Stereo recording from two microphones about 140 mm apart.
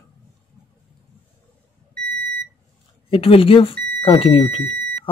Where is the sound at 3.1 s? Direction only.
40° left (ahead or behind).